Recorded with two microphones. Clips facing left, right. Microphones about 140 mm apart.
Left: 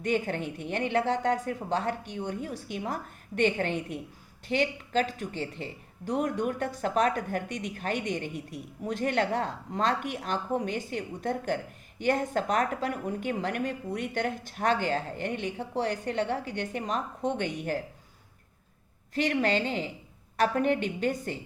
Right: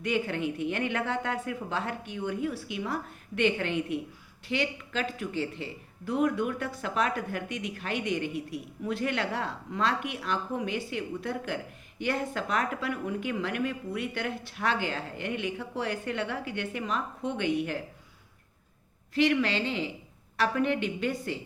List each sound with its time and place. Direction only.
0.0 s speech: 40° left (ahead or behind)
19.1 s a woman's voice: 40° left (ahead or behind)